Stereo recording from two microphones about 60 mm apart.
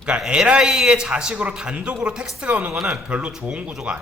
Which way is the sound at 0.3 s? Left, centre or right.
Centre.